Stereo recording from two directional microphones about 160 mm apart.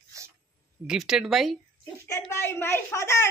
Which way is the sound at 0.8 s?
5° right (ahead or behind).